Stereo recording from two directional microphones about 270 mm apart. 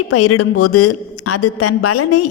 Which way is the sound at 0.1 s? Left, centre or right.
Left.